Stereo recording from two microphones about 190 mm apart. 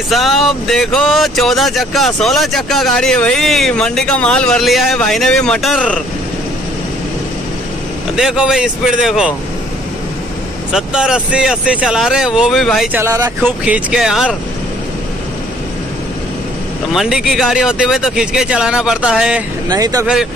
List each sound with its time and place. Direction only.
0.1 s speech: centre (ahead or behind)
8.2 s speech: 5° right (ahead or behind)
10.7 s speech: 5° right (ahead or behind)
12.9 s speech: 15° right (ahead or behind)
16.9 s speech: centre (ahead or behind)
19.7 s speech: 20° right (ahead or behind)